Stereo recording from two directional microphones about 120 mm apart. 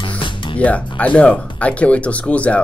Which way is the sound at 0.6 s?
10° left (ahead or behind).